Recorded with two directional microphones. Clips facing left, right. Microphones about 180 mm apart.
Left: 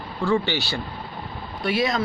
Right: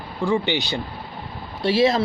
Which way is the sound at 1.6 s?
30° right (ahead or behind).